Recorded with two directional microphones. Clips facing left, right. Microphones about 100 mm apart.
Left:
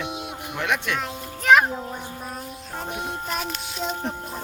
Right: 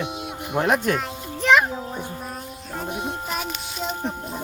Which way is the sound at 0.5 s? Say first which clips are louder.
Right 6 dB; 40° right (ahead or behind).